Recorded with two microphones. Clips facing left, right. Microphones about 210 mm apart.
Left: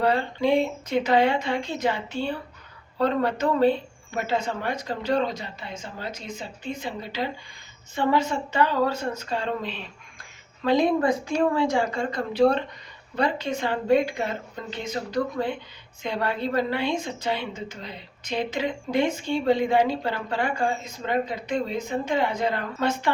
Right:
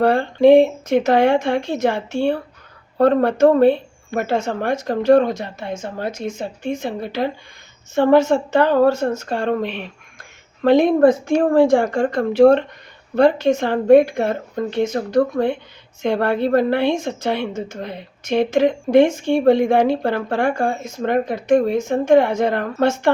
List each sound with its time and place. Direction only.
0.0 s a woman's voice: 55° right (ahead or behind)
10.6 s a woman's voice: 55° right (ahead or behind)